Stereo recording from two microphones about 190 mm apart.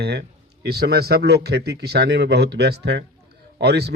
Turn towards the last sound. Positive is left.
turn(degrees=-60)  # may be behind; listen again after turning